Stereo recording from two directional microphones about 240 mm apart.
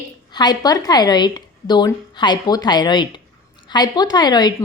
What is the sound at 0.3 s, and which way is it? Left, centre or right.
A woman's voice, centre.